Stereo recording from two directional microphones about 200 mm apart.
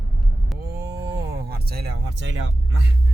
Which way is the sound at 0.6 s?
55° right (ahead or behind).